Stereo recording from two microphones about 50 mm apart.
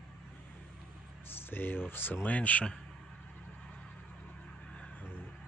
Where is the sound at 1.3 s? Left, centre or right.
Left.